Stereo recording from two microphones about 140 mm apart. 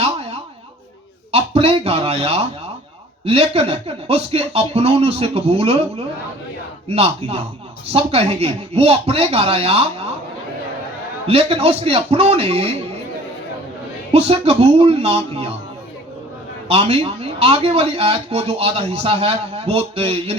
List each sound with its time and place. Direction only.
0.0 s a sound: 45° right (ahead or behind)
1.3 s a man's voice: 45° right (ahead or behind)
11.3 s a man's voice: 45° right (ahead or behind)
14.1 s a man's voice: 45° right (ahead or behind)
16.6 s a man's voice: 45° right (ahead or behind)